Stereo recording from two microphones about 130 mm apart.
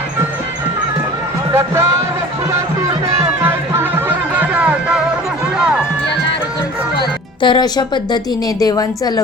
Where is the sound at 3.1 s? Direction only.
20° right (ahead or behind).